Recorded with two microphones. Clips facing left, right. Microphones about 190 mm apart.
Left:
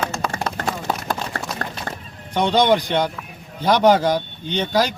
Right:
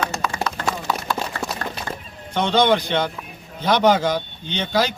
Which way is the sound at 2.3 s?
10° left (ahead or behind).